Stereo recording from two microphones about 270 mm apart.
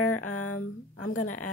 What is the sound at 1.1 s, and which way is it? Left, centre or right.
Speech, left.